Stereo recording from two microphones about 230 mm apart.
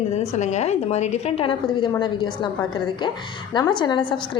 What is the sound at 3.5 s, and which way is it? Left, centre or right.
Speech, centre.